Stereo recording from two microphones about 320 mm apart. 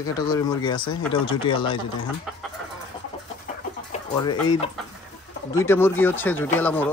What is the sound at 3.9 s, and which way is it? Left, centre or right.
Chicken, left.